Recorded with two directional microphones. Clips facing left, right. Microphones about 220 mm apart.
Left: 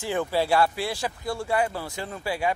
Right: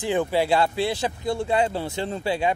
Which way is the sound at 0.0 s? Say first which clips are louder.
Right 3 dB; 20° right (ahead or behind).